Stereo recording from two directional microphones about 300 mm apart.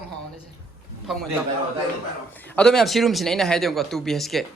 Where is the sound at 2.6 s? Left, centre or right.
Centre.